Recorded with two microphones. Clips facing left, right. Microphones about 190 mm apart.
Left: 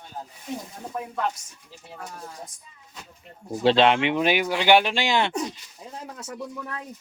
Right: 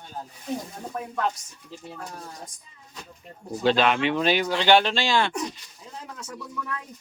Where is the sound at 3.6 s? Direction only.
25° left (ahead or behind).